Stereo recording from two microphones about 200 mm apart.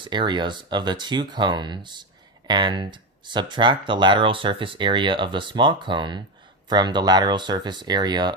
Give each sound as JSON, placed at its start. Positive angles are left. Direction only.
{"t": 0.0, "sound": "speech", "side_deg": -25}